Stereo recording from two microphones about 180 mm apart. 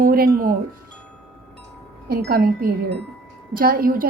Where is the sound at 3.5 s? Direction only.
55° right (ahead or behind).